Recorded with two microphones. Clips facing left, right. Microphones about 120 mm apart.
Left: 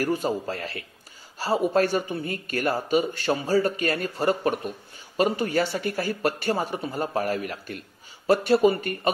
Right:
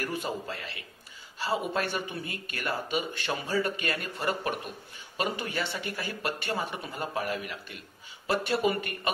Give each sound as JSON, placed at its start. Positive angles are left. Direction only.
{"t": 0.0, "sound": "a man's voice", "side_deg": 35}